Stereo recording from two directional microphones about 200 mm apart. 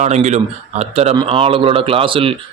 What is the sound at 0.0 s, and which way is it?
Speech, 35° right (ahead or behind).